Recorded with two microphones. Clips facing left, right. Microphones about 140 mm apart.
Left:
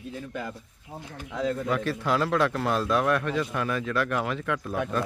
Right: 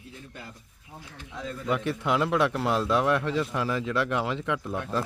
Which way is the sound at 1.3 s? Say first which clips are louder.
Left 9 dB; 75° left (ahead or behind).